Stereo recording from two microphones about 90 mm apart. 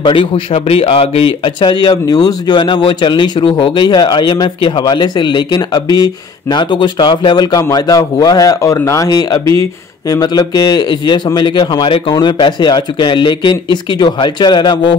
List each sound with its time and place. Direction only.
0.0 s speech: 75° left (ahead or behind); by 6.6 s 45° left (ahead or behind)
6.7 s speech: 60° left (ahead or behind)
7.5 s speech: 45° left (ahead or behind); by 15.0 s 60° left (ahead or behind)